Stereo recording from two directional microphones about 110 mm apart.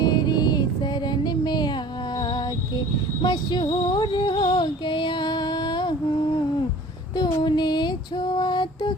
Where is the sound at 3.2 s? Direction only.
45° left (ahead or behind).